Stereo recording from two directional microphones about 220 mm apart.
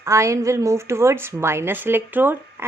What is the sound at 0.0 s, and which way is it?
A woman's voice, 15° right (ahead or behind).